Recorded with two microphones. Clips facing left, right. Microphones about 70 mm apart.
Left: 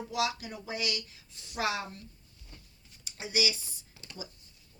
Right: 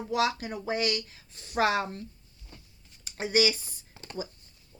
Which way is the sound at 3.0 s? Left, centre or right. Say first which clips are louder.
Right 7 dB; right.